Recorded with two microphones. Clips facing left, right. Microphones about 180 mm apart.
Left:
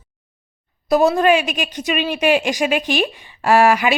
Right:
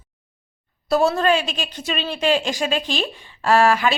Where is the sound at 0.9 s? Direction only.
15° left (ahead or behind).